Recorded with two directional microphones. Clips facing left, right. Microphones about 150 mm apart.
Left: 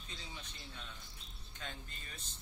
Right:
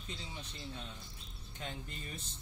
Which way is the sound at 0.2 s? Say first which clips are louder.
Right 4 dB; 30° right (ahead or behind).